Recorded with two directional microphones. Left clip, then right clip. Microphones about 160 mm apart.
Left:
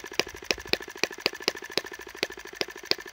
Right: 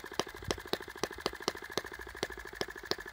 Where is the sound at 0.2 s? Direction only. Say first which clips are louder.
Left 8 dB; 20° left (ahead or behind).